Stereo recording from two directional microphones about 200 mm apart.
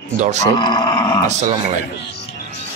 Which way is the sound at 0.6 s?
20° left (ahead or behind).